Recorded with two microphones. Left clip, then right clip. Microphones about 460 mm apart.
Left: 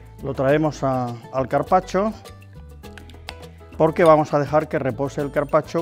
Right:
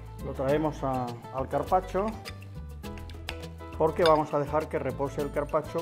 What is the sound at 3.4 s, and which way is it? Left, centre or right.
Speech, left.